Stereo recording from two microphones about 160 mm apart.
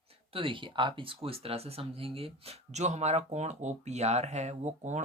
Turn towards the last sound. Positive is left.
turn(degrees=-45)  # may be behind; listen again after turning